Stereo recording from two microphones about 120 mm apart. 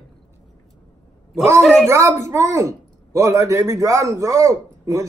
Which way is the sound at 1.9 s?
25° right (ahead or behind).